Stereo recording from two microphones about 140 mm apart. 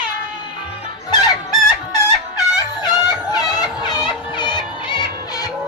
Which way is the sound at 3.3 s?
25° left (ahead or behind).